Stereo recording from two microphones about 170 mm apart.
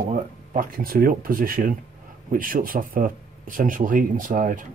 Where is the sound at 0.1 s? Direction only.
50° right (ahead or behind).